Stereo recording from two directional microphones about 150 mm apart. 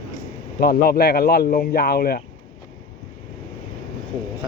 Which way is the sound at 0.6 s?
90° left.